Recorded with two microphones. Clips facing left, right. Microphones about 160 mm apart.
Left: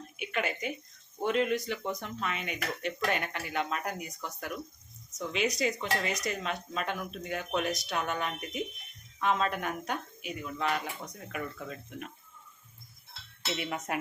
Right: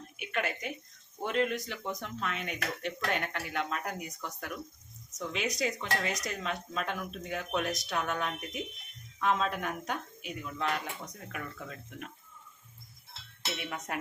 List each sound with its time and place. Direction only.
0.2 s speech: centre (ahead or behind)
13.6 s speech: 5° left (ahead or behind)